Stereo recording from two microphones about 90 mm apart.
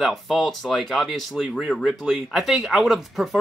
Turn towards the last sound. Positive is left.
turn(degrees=0)  # may be behind; listen again after turning